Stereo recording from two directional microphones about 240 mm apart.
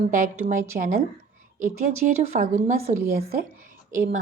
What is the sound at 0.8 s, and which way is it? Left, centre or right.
Speech, right.